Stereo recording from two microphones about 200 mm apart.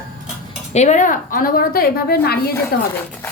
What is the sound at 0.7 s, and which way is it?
A woman's voice, 35° left (ahead or behind).